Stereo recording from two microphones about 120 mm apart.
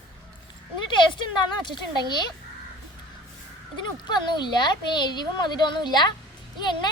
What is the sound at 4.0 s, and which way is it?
Speech, 35° left (ahead or behind).